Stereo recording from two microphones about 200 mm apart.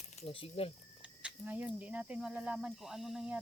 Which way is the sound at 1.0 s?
5° right (ahead or behind).